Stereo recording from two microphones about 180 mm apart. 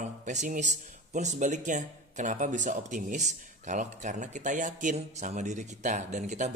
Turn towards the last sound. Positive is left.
turn(degrees=-40)  # may be behind; listen again after turning